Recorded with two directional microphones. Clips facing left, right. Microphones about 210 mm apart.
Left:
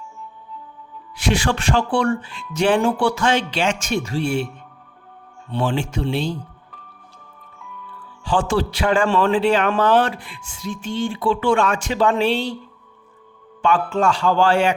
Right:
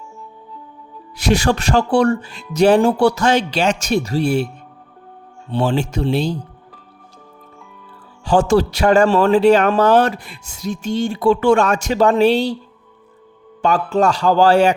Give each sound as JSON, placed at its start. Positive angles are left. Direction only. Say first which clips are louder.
{"t": 1.1, "sound": "speech", "louder": "right 4 dB", "side_deg": -40}
{"t": 5.5, "sound": "speech", "louder": "right 4 dB", "side_deg": -35}
{"t": 7.9, "sound": "speech", "louder": "right 6 dB", "side_deg": -40}
{"t": 13.6, "sound": "speech", "louder": "right 3 dB", "side_deg": -40}